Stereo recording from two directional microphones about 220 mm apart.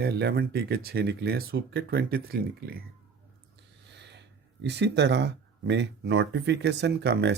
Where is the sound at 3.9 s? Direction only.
50° right (ahead or behind).